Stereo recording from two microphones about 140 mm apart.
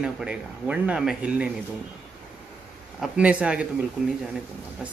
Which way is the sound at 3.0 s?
10° right (ahead or behind).